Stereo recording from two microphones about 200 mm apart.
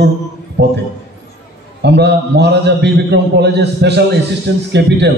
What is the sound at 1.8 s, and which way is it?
A man's voice, 60° right (ahead or behind).